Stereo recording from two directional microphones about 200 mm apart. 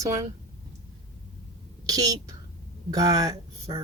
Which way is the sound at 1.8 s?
20° right (ahead or behind).